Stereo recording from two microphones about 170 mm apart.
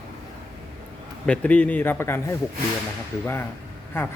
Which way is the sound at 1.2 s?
5° left (ahead or behind).